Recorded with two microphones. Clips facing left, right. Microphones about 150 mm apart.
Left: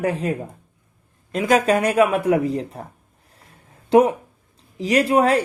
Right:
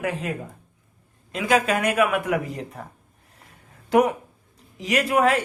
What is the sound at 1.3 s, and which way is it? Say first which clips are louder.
A man's voice: left 4 dB; 40° left (ahead or behind).